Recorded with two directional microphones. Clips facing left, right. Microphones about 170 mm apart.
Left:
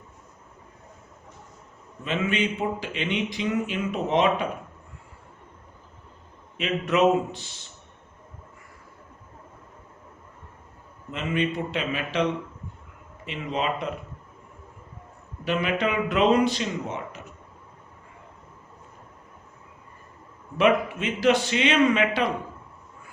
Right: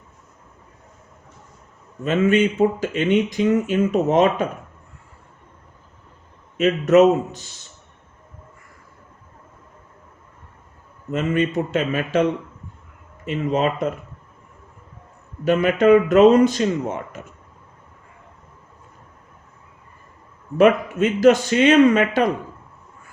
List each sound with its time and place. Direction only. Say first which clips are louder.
2.0 s speech: right 9 dB; 45° right (ahead or behind)
6.6 s speech: right 8 dB; 45° right (ahead or behind)
11.1 s speech: right 6 dB; 45° right (ahead or behind)
13.2 s speech: right 7 dB; 45° right (ahead or behind)
15.4 s speech: right 10 dB; 45° right (ahead or behind)
20.6 s speech: right 6 dB; 45° right (ahead or behind)